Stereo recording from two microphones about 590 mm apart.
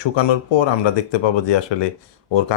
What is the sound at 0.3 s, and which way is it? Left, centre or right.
Speech, left.